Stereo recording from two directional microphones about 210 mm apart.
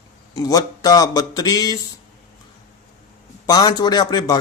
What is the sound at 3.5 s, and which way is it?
Speech, 20° left (ahead or behind).